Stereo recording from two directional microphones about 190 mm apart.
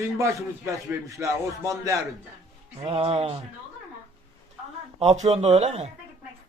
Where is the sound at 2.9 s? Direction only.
30° right (ahead or behind).